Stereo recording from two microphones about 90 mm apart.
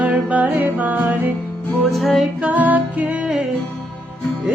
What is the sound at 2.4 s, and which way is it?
Music, 15° right (ahead or behind).